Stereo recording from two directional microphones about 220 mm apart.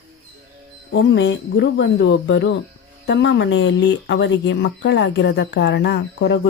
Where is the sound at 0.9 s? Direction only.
55° left (ahead or behind).